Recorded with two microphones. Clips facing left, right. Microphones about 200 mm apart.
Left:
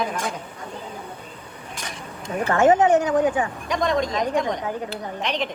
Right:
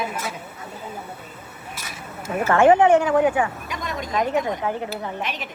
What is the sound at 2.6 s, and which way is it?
Speech, 40° left (ahead or behind).